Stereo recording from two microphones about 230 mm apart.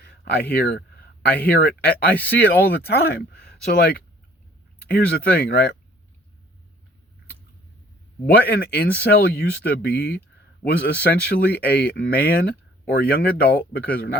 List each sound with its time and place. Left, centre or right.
0.0 s speech: left
8.3 s speech: left